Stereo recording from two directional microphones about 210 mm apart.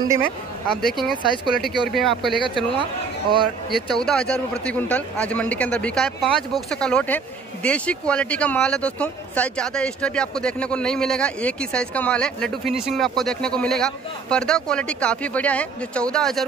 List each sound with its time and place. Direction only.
0.8 s speech: centre (ahead or behind)
2.5 s speech: 25° right (ahead or behind)
3.7 s speech: centre (ahead or behind)